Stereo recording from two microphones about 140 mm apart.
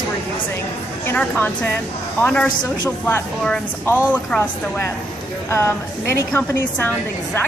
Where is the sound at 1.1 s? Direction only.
15° left (ahead or behind).